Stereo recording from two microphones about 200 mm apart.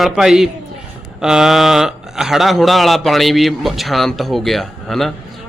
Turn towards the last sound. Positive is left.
turn(degrees=0)  # may be behind; listen again after turning